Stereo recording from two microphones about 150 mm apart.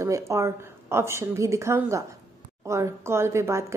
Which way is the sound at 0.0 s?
20° right (ahead or behind).